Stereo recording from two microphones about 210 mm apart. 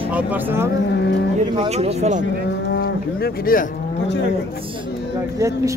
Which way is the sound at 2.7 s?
45° left (ahead or behind).